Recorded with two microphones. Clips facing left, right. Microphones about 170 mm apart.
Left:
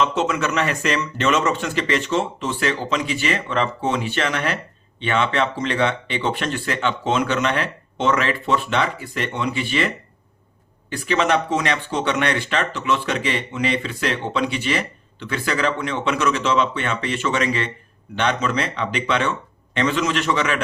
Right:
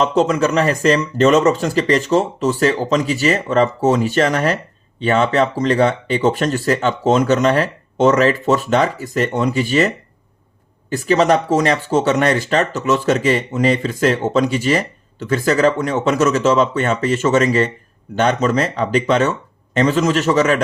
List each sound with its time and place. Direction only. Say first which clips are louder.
0.0 s speech: right 6 dB; 35° right (ahead or behind)